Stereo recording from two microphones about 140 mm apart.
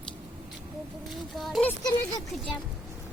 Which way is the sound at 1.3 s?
Centre (ahead or behind).